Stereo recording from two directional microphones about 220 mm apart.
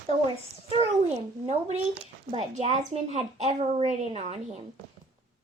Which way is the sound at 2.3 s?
30° right (ahead or behind).